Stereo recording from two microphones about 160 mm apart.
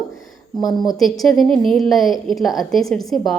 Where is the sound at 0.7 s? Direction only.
Centre (ahead or behind).